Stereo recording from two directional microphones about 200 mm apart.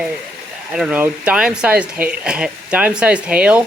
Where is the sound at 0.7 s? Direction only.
5° right (ahead or behind).